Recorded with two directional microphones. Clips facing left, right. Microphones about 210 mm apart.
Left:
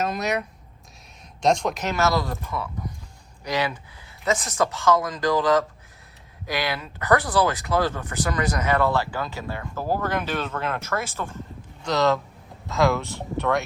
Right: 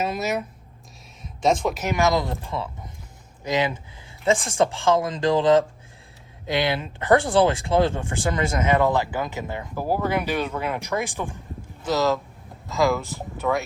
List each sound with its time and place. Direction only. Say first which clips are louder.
0.0 s speech: even; 5° right (ahead or behind)
11.8 s speech: even; centre (ahead or behind)